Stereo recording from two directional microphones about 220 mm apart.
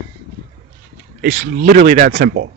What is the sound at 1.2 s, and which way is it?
Speech, 40° right (ahead or behind).